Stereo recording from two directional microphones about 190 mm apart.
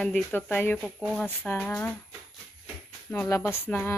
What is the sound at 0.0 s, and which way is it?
Speech, 5° left (ahead or behind).